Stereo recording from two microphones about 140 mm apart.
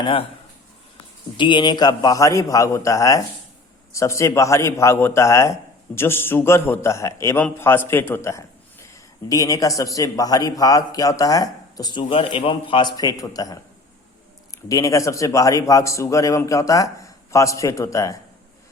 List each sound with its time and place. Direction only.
0.0 s speech: 40° left (ahead or behind)
1.4 s a man's voice: 35° left (ahead or behind)